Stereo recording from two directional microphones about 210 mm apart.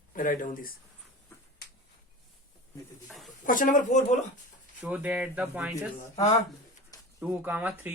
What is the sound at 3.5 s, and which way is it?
Speech, 40° left (ahead or behind).